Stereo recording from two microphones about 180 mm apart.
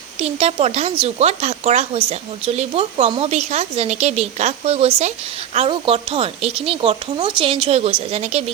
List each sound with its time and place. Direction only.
0.2 s speech: 35° right (ahead or behind)